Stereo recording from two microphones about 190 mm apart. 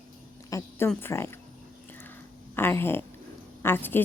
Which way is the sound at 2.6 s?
10° left (ahead or behind).